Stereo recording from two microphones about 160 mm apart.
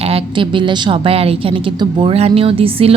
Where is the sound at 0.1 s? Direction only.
30° right (ahead or behind).